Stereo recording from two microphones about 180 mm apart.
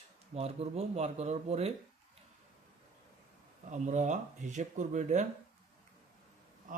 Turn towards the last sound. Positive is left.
turn(degrees=-45)  # may be behind; listen again after turning